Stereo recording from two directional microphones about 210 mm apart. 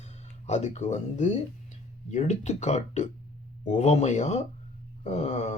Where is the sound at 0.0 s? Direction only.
30° left (ahead or behind).